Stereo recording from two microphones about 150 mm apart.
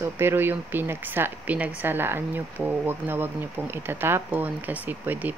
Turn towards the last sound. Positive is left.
turn(degrees=-10)  # may be behind; listen again after turning